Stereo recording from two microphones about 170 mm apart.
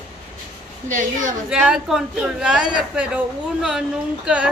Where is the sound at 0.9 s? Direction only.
50° right (ahead or behind).